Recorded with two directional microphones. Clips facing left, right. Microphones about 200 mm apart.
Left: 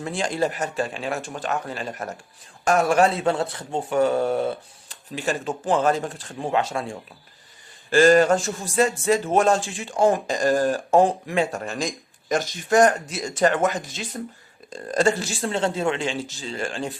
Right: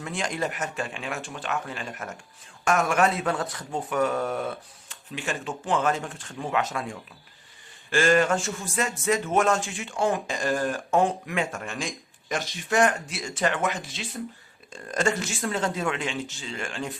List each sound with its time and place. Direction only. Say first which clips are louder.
0.0 s a man's voice: left 5 dB; 35° left (ahead or behind)